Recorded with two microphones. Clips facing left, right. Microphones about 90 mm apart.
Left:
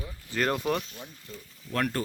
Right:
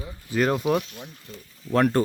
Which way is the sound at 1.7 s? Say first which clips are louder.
Right 9 dB; 25° right (ahead or behind).